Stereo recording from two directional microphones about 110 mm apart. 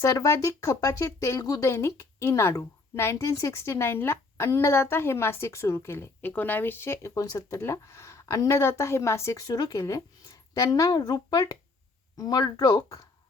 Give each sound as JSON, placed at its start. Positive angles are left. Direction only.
{"t": 0.0, "sound": "speech", "side_deg": 30}